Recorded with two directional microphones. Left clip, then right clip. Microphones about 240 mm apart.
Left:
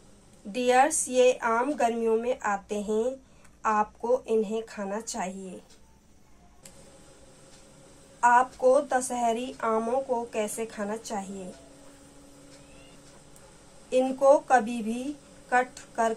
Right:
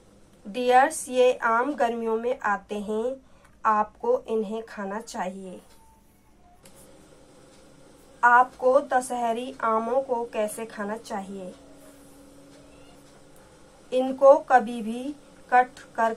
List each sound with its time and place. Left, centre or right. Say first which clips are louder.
0.5 s a woman's voice: right 3 dB; centre
8.2 s a woman's voice: right 3 dB; centre
13.8 s a woman's voice: right 4 dB; centre